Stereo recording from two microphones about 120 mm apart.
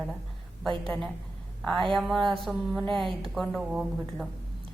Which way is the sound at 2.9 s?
45° right (ahead or behind).